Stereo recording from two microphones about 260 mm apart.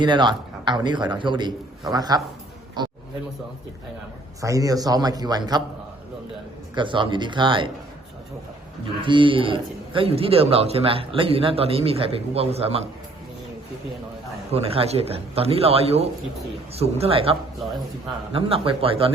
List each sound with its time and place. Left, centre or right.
0.0 s a man's voice: centre
4.4 s a man's voice: centre
6.7 s speech: centre
9.0 s speech: centre
14.5 s speech: right
18.3 s speech: right